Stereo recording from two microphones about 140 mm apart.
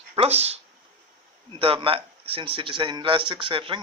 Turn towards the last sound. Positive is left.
turn(degrees=-40)  # may be behind; listen again after turning